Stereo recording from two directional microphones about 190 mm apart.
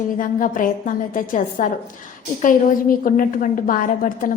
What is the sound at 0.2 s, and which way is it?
A woman's voice, 45° left (ahead or behind).